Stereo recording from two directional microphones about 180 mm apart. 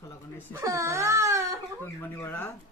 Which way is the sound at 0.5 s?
15° right (ahead or behind).